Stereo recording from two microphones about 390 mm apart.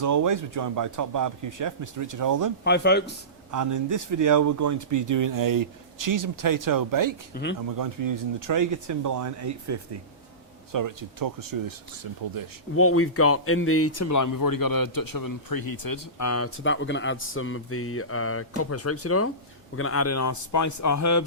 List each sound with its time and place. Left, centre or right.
0.0 s speech: right
2.6 s speech: left
3.5 s speech: right
12.7 s speech: left